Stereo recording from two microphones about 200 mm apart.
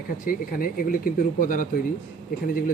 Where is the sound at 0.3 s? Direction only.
45° left (ahead or behind).